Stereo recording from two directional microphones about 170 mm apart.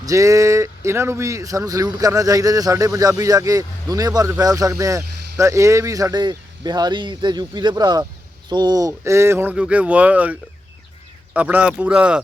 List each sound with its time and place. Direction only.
0.0 s speech: 20° right (ahead or behind)
11.3 s speech: 10° right (ahead or behind)